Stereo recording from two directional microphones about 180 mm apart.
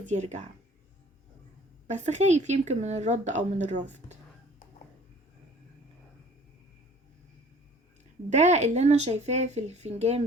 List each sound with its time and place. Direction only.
0.1 s speech: 40° right (ahead or behind)
1.9 s speech: 40° right (ahead or behind)
8.3 s speech: 40° right (ahead or behind)